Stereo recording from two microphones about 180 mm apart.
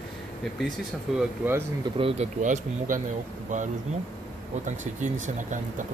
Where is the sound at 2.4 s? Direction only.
45° right (ahead or behind).